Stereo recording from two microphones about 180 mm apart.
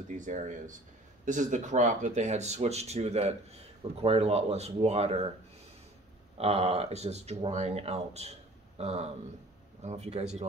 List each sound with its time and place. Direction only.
0.1 s speech: 45° right (ahead or behind)
6.3 s speech: 35° right (ahead or behind)